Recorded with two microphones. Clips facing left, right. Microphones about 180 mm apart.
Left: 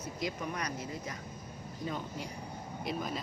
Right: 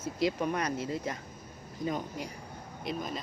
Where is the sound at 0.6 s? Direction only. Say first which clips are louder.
Right 6 dB; 55° right (ahead or behind).